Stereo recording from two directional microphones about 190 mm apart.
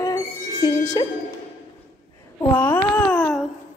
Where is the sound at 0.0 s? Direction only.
20° left (ahead or behind).